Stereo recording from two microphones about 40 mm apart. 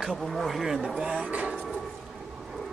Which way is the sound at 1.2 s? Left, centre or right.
Right.